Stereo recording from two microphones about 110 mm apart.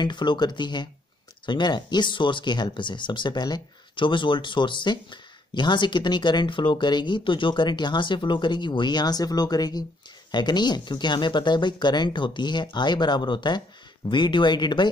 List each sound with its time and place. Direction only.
0.0 s speech: 45° left (ahead or behind)